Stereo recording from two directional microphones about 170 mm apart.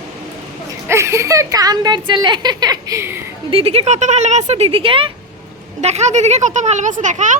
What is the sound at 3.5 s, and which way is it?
Speech, 35° right (ahead or behind).